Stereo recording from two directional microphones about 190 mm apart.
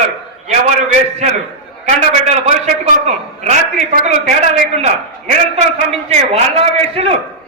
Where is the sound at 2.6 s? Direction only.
40° right (ahead or behind).